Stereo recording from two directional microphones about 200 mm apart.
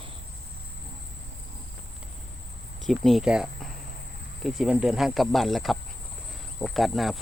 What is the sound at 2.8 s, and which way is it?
Speech, centre (ahead or behind).